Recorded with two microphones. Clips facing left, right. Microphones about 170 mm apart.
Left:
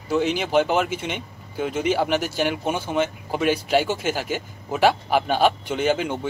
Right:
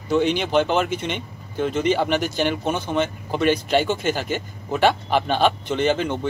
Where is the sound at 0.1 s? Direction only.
5° left (ahead or behind).